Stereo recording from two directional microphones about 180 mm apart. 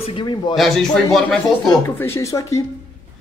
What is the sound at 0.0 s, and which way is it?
Speech, 25° left (ahead or behind).